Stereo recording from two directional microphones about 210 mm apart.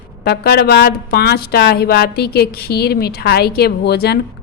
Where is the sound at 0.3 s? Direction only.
50° left (ahead or behind).